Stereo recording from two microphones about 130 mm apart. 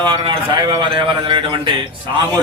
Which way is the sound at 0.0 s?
35° right (ahead or behind).